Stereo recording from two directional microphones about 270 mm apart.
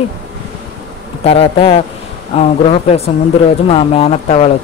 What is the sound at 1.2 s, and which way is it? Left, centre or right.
Speech, left.